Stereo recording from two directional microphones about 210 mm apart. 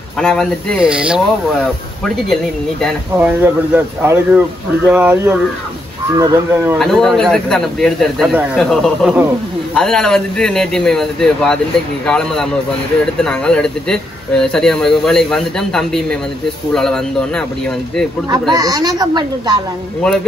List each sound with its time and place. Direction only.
0.2 s speech: 5° left (ahead or behind)
3.2 s speech: 10° right (ahead or behind)
6.8 s speech: centre (ahead or behind)
18.5 s speech: 15° right (ahead or behind)